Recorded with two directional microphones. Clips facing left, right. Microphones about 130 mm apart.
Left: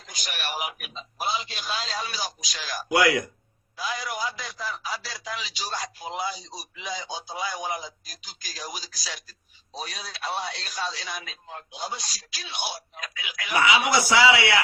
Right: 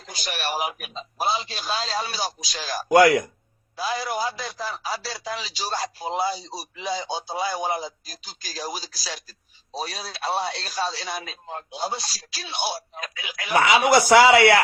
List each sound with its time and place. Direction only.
0.0 s a man's voice: 35° right (ahead or behind)
2.9 s a man's voice: 45° right (ahead or behind)
3.8 s a man's voice: 30° right (ahead or behind)
13.6 s a man's voice: 50° right (ahead or behind)